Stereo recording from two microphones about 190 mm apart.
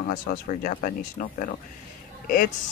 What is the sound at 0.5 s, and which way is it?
Speech, 45° left (ahead or behind).